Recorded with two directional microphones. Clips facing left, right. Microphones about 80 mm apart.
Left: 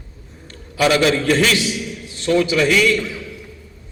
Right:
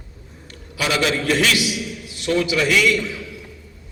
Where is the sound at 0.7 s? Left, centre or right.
Left.